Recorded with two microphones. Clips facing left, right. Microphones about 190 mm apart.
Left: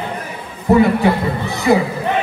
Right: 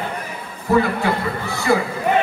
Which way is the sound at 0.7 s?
20° left (ahead or behind).